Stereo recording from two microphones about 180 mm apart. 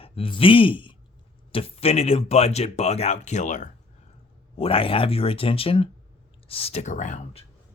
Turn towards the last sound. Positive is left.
turn(degrees=45)  # may be behind; listen again after turning